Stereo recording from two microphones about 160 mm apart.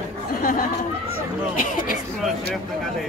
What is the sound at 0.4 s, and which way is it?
Chatter, 60° left (ahead or behind).